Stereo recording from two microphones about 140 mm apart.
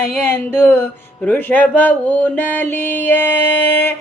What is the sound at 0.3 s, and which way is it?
Music, 15° left (ahead or behind).